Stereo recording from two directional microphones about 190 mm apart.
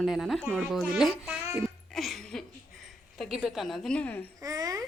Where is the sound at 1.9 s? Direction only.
Centre (ahead or behind).